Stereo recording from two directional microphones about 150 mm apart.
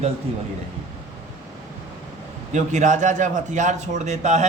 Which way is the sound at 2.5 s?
55° right (ahead or behind).